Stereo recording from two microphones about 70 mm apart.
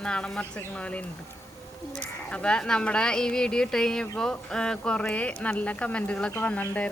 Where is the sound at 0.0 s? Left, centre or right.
Centre.